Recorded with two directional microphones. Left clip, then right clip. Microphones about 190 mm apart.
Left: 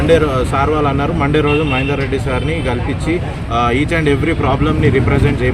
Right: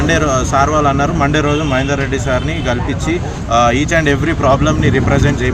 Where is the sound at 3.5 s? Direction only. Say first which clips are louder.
Right 3 dB; 5° right (ahead or behind).